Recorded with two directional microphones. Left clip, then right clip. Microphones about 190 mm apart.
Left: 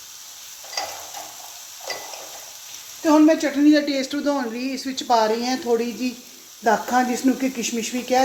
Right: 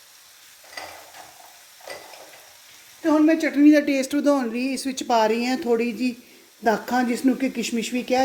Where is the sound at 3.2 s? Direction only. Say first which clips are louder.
Even; 55° right (ahead or behind).